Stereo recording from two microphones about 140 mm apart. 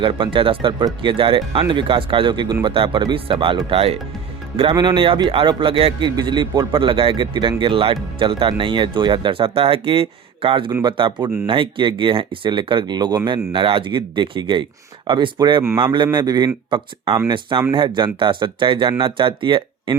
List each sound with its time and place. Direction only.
0.0 s speech: 35° right (ahead or behind)
4.7 s speech: 30° right (ahead or behind)